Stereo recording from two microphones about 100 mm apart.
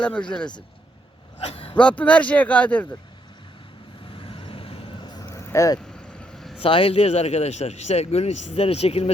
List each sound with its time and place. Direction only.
0.0 s speech: 10° left (ahead or behind)
1.5 s speech: 70° left (ahead or behind)
1.7 s speech: 10° left (ahead or behind)
4.1 s vehicle: 65° left (ahead or behind)
5.0 s vehicle: 45° left (ahead or behind)
5.3 s vehicle: 30° left (ahead or behind)
5.8 s vehicle: 10° left (ahead or behind)
6.6 s speech: 65° left (ahead or behind); by 9.0 s 90° left